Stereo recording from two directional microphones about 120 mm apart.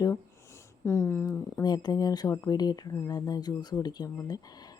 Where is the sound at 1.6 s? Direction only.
35° left (ahead or behind).